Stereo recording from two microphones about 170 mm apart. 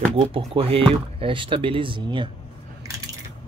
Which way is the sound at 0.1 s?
35° right (ahead or behind).